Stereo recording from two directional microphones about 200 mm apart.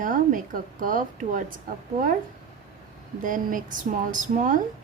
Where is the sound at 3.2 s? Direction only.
40° right (ahead or behind).